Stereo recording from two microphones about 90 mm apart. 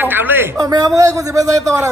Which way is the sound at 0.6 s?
45° right (ahead or behind).